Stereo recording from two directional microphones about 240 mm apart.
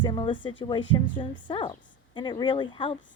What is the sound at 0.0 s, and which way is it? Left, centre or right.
A woman's voice, centre.